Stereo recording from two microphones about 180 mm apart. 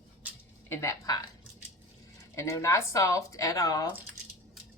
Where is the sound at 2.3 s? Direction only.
15° left (ahead or behind).